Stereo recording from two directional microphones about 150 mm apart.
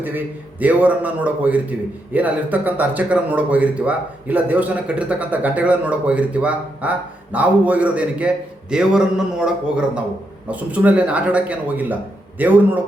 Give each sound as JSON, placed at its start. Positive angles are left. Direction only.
{"t": 0.0, "sound": "a man's voice", "side_deg": -10}